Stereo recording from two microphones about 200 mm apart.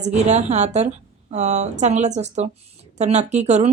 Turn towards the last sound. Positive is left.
turn(degrees=-35)  # may be behind; listen again after turning